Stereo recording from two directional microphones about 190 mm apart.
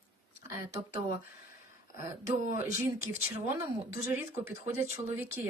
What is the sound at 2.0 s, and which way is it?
Speech, 15° right (ahead or behind).